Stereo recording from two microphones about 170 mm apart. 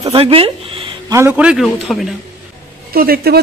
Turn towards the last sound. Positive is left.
turn(degrees=-65)  # may be behind; listen again after turning